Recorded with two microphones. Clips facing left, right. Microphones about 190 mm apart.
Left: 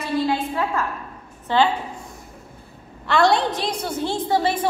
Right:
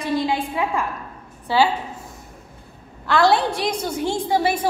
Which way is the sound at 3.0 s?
Centre (ahead or behind).